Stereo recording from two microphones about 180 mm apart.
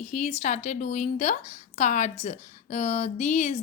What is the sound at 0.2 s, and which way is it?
A woman's voice, 35° left (ahead or behind).